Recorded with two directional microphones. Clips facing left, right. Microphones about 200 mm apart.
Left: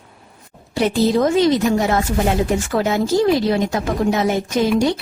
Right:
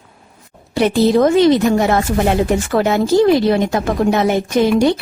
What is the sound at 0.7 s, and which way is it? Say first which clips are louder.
Speech: right 4 dB; 65° right (ahead or behind).